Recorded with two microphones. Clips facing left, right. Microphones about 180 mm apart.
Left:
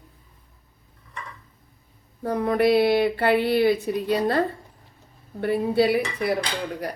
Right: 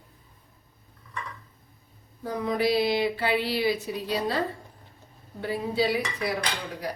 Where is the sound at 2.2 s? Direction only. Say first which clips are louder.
Left 5 dB; 60° left (ahead or behind).